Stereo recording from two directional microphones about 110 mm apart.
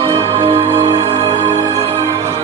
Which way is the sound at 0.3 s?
60° right (ahead or behind).